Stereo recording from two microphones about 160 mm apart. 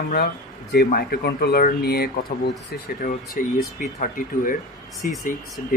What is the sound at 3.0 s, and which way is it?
Speech, 55° left (ahead or behind).